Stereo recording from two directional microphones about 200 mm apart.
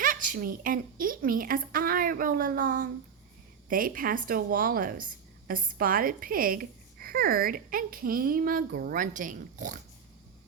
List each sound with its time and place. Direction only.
0.0 s a woman's voice: 45° right (ahead or behind)